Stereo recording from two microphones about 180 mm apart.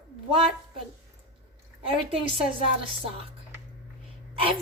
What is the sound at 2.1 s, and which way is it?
A woman's voice, 30° right (ahead or behind).